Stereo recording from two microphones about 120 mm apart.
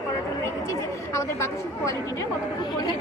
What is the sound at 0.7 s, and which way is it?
Speech, 25° left (ahead or behind).